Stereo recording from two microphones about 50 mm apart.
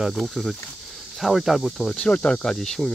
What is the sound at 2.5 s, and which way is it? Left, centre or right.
Speech, centre.